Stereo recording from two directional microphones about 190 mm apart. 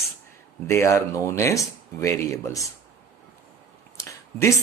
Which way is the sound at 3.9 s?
15° left (ahead or behind).